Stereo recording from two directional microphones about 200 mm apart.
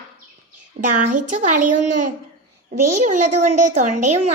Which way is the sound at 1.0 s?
35° right (ahead or behind).